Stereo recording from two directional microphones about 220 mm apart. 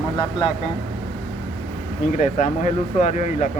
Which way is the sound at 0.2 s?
20° left (ahead or behind).